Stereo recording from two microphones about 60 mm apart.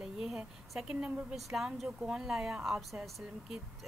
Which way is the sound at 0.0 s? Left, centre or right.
Centre.